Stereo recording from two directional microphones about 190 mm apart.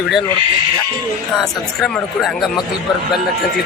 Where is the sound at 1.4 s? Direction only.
Centre (ahead or behind).